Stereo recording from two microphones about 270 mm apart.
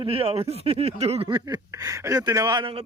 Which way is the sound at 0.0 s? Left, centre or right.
Right.